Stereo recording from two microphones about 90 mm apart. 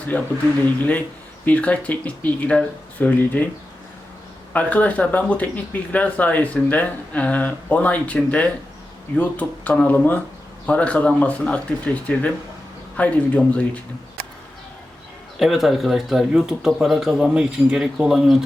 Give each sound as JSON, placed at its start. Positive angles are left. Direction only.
{"t": 0.8, "sound": "speech", "side_deg": 15}
{"t": 4.5, "sound": "speech", "side_deg": 15}
{"t": 15.4, "sound": "speech", "side_deg": 0}